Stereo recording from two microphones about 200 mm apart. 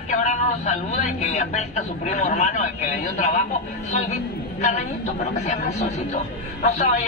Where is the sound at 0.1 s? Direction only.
35° left (ahead or behind).